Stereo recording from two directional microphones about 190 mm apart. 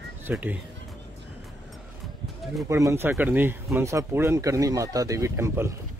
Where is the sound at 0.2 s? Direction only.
10° right (ahead or behind).